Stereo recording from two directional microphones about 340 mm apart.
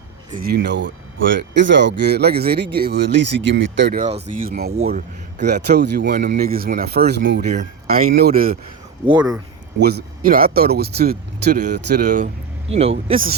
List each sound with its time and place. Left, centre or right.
0.3 s speech: right
9.0 s speech: centre
9.8 s speech: right